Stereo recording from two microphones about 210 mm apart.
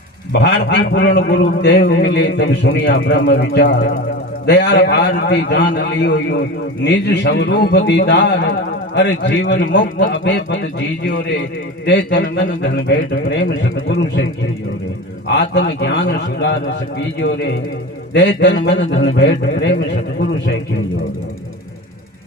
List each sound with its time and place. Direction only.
0.3 s a man's voice: 55° left (ahead or behind)
15.4 s a man's voice: 55° left (ahead or behind)
18.1 s a man's voice: 55° left (ahead or behind)